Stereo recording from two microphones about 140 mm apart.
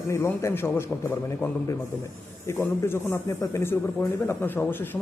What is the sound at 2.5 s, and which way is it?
Speech, 15° left (ahead or behind).